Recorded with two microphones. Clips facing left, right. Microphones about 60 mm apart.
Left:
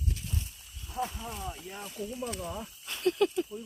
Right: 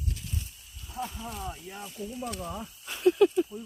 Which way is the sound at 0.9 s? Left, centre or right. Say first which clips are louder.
Left 1 dB; centre.